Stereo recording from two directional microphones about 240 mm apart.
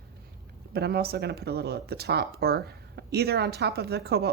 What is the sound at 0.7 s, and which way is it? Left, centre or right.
Speech, right.